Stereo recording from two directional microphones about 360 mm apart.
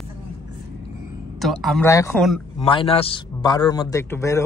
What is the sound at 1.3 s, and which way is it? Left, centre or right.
Speech, centre.